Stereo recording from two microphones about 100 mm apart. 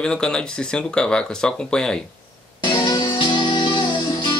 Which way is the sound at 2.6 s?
50° left (ahead or behind).